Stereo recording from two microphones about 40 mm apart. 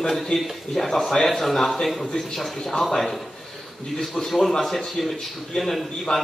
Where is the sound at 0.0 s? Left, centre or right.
Centre.